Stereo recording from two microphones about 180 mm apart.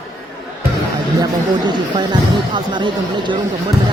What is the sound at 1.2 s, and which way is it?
Speech, 25° right (ahead or behind).